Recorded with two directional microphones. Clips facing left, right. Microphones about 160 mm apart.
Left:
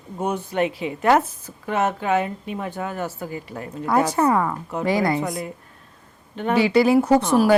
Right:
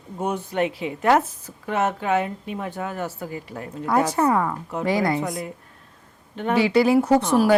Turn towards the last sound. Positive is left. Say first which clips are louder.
# left 1 dB
turn(degrees=5)  # may be behind; listen again after turning